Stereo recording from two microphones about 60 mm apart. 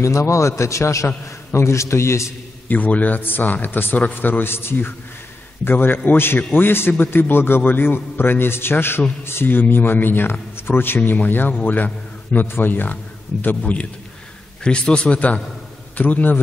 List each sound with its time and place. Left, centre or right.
0.0 s a man's voice: left
2.7 s a man's voice: left